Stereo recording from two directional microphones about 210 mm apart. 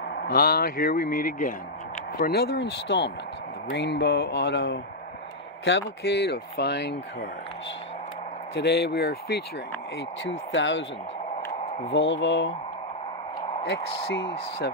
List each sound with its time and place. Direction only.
0.1 s a man's voice: 50° left (ahead or behind)
8.5 s a man's voice: 50° left (ahead or behind)
10.5 s speech: 60° left (ahead or behind)
11.9 s speech: 60° left (ahead or behind)
14.0 s a man's voice: 55° left (ahead or behind)